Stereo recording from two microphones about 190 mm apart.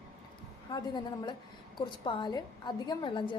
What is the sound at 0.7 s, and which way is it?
A woman's voice, 25° left (ahead or behind).